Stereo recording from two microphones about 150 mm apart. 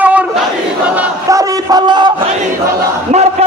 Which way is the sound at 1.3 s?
25° right (ahead or behind).